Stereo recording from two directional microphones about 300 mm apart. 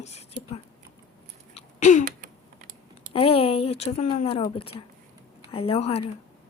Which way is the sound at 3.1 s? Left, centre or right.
Centre.